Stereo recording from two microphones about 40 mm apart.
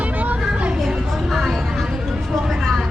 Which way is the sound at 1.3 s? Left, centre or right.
Centre.